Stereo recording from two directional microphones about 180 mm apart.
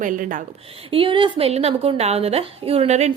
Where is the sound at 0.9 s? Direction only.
30° right (ahead or behind).